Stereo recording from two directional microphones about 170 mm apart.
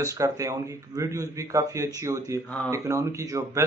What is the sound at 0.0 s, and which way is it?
A man's voice, 20° right (ahead or behind).